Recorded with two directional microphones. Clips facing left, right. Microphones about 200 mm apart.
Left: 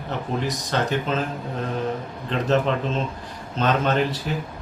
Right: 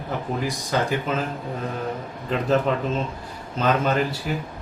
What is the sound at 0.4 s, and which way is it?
Speech, 10° right (ahead or behind).